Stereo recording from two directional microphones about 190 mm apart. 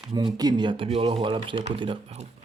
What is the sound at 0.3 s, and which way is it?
Speech, 25° right (ahead or behind).